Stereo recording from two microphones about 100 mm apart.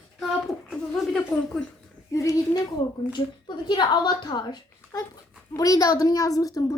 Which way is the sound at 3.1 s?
45° left (ahead or behind).